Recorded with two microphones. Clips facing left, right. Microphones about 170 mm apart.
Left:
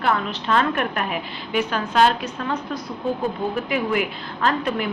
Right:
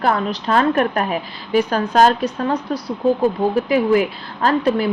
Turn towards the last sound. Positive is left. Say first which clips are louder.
# right 6 dB
turn(degrees=-35)  # may be behind; listen again after turning